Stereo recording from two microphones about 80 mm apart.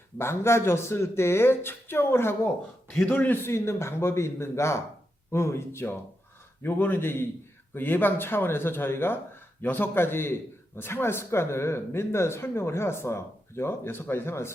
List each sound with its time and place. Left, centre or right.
0.2 s speech: left